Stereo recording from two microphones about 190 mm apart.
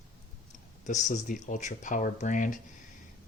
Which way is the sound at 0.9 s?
40° left (ahead or behind).